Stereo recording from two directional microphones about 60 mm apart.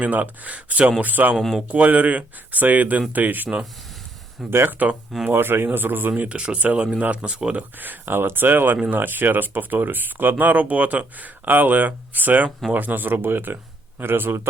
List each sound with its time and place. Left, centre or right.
0.0 s speech: right
1.4 s speech: centre
1.7 s speech: right
4.4 s speech: centre
4.8 s speech: right
5.3 s speech: right
6.2 s speech: centre
7.8 s speech: right